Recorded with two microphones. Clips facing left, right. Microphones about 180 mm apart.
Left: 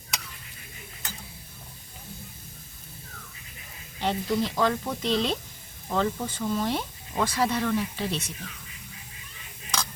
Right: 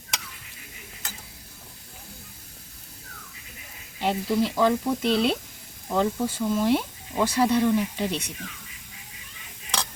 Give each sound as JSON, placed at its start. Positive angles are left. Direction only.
{"t": 4.0, "sound": "speech", "side_deg": -10}